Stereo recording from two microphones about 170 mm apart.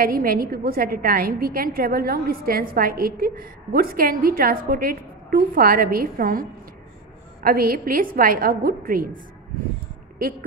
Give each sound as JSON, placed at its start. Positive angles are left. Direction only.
{"t": 0.0, "sound": "a woman's voice", "side_deg": -60}
{"t": 7.4, "sound": "a woman's voice", "side_deg": -60}